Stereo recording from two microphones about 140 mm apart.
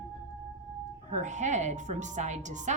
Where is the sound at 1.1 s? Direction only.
60° right (ahead or behind).